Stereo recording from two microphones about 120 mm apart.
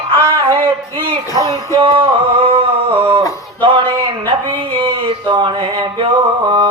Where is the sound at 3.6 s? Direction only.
45° right (ahead or behind).